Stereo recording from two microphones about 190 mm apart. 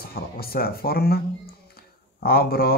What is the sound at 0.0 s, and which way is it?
Speech, 50° left (ahead or behind).